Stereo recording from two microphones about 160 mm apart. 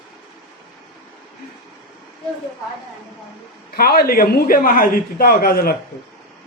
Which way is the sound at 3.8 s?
70° left (ahead or behind).